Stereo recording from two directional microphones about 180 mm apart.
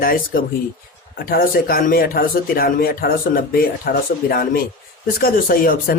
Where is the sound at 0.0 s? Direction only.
55° left (ahead or behind).